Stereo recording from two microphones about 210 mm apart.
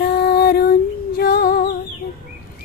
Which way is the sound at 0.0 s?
45° left (ahead or behind).